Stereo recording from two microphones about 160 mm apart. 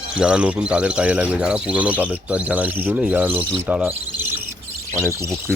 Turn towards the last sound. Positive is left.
turn(degrees=-20)  # may be behind; listen again after turning